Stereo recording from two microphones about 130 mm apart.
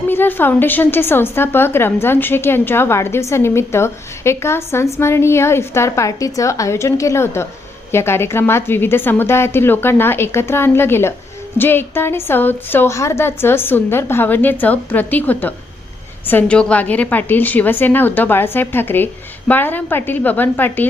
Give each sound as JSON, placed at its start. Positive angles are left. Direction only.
{"t": 0.1, "sound": "a woman's voice", "side_deg": 15}